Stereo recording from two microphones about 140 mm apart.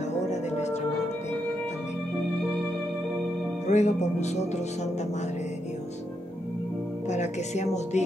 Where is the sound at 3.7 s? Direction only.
55° left (ahead or behind).